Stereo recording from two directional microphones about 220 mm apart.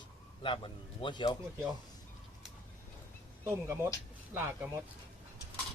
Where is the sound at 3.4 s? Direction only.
10° right (ahead or behind).